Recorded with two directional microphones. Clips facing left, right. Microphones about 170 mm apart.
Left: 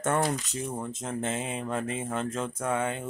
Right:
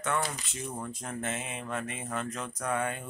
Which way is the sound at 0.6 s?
20° left (ahead or behind).